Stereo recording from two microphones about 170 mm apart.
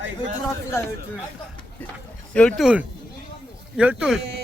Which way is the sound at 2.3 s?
5° left (ahead or behind).